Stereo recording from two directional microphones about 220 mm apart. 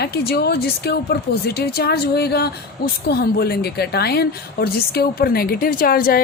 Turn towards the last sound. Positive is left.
turn(degrees=40)  # may be behind; listen again after turning